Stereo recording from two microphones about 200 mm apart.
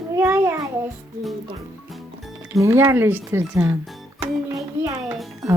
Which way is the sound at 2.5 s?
15° right (ahead or behind).